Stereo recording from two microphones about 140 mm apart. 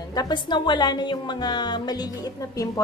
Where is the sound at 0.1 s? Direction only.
30° left (ahead or behind).